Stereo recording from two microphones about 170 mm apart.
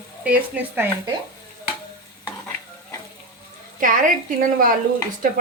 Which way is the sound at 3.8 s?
50° right (ahead or behind).